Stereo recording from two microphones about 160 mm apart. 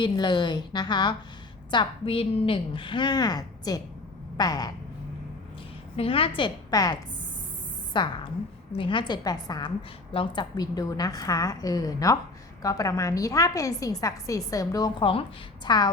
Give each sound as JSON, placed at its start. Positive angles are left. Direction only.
{"t": 0.0, "sound": "a woman's voice", "side_deg": 30}
{"t": 6.0, "sound": "a woman's voice", "side_deg": 35}